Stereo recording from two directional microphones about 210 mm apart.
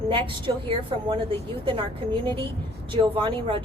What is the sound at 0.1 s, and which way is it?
A woman's voice, 25° right (ahead or behind).